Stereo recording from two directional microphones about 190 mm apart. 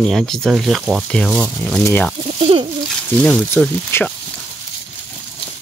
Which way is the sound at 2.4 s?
30° right (ahead or behind).